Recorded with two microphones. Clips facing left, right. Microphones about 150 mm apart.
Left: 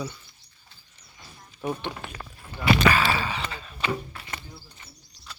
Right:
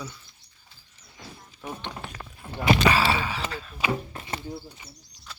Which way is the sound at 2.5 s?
20° right (ahead or behind).